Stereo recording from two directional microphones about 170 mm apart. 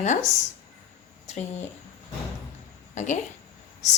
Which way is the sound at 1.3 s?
40° left (ahead or behind).